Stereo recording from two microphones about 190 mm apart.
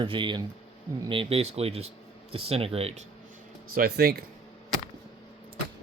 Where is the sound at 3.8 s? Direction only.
55° right (ahead or behind).